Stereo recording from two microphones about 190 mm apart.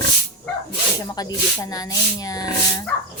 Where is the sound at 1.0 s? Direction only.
20° left (ahead or behind).